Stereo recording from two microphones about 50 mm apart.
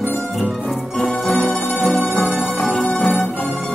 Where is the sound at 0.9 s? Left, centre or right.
Centre.